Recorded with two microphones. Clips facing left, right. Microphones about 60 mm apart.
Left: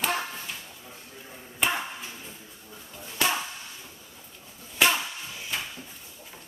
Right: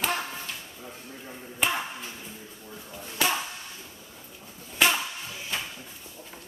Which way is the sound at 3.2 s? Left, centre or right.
Centre.